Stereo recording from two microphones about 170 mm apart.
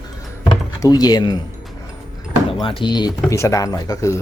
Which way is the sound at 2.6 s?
30° left (ahead or behind).